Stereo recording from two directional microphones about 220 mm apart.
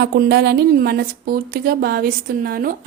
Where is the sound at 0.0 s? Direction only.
50° right (ahead or behind).